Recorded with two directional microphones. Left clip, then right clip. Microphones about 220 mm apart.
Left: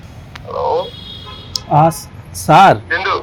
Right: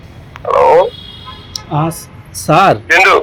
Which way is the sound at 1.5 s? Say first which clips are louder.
Left 6 dB; 15° left (ahead or behind).